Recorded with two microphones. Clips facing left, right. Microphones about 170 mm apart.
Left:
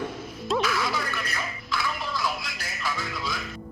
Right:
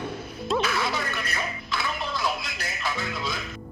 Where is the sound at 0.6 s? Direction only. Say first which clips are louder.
Even; 25° right (ahead or behind).